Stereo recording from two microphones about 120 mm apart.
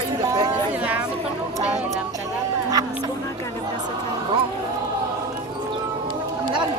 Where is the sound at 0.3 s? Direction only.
35° right (ahead or behind).